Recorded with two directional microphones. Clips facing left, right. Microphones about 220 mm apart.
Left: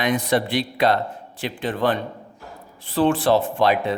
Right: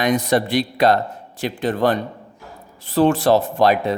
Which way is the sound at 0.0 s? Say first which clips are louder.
Right 3 dB; 40° right (ahead or behind).